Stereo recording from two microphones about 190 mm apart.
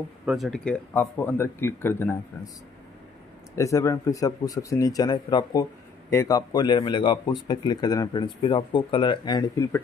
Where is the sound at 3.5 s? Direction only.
15° left (ahead or behind).